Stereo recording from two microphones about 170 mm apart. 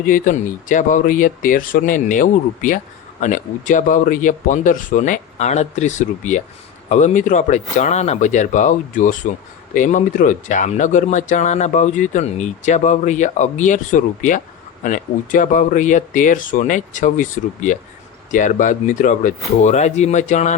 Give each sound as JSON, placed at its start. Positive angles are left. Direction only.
{"t": 0.0, "sound": "speech", "side_deg": 50}